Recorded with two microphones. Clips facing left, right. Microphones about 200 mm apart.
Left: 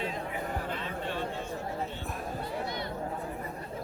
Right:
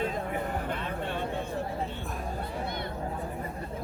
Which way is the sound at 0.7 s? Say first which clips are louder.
Right 2 dB; 55° right (ahead or behind).